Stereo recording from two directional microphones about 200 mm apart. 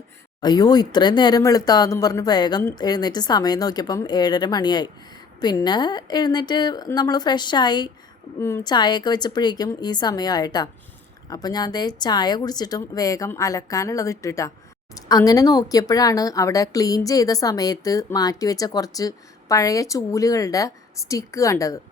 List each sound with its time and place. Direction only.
0.4 s speech: 20° left (ahead or behind)